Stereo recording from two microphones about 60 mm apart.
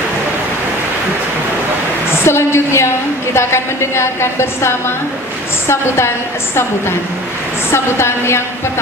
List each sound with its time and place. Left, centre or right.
2.2 s a woman's voice: left
7.7 s a woman's voice: left